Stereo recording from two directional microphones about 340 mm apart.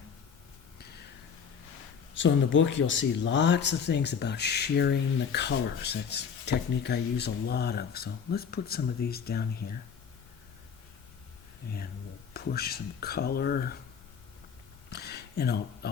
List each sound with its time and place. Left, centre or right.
2.1 s speech: left
11.6 s speech: left
14.8 s a sound: left